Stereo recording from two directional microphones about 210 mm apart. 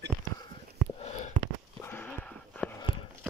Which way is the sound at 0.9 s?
30° left (ahead or behind).